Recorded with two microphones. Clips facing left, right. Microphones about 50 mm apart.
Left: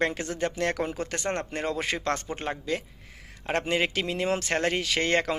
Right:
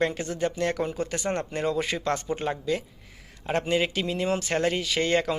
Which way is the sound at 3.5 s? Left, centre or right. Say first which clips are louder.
Right 1 dB; left.